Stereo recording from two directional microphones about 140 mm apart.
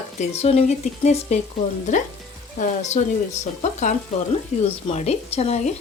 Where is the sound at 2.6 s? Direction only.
55° left (ahead or behind).